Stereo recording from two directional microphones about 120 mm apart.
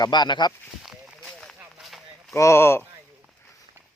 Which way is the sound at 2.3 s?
25° left (ahead or behind).